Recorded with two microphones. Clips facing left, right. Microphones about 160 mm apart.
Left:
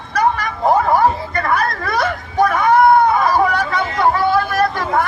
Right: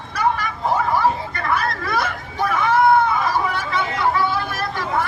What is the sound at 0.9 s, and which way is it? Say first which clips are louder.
Hubbub: left 5 dB; 45° left (ahead or behind).